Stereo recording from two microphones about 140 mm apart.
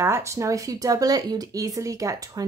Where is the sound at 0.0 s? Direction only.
20° right (ahead or behind).